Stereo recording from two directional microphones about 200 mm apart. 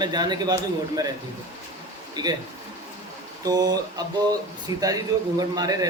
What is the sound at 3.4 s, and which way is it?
A man's voice, 20° right (ahead or behind).